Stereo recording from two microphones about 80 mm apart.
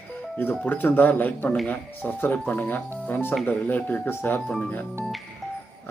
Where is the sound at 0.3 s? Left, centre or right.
Left.